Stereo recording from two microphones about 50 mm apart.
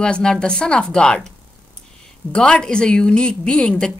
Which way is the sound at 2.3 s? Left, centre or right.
Centre.